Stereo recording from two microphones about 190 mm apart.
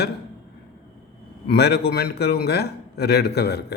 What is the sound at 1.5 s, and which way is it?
A man's voice, 60° left (ahead or behind).